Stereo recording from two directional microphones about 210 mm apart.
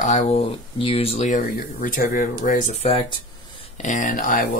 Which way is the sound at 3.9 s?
40° left (ahead or behind).